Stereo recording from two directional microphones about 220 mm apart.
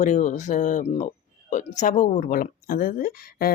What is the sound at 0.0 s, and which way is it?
Speech, 35° left (ahead or behind).